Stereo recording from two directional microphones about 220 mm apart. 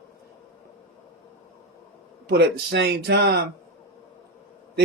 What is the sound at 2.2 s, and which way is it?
Speech, 50° right (ahead or behind).